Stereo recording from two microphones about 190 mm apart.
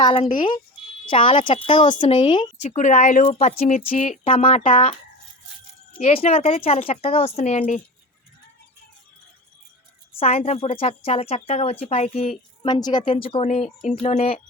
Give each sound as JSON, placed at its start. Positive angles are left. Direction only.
{"t": 0.0, "sound": "a woman's voice", "side_deg": 25}
{"t": 2.6, "sound": "speech", "side_deg": 40}
{"t": 4.2, "sound": "speech", "side_deg": 30}
{"t": 10.2, "sound": "speech", "side_deg": 35}
{"t": 12.6, "sound": "a woman's voice", "side_deg": 20}